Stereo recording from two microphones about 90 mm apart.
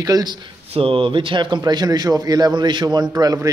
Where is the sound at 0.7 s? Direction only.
85° right; by 1.6 s 60° right (ahead or behind).